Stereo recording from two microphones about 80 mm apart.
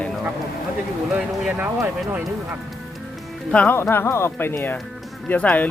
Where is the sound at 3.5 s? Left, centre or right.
Centre.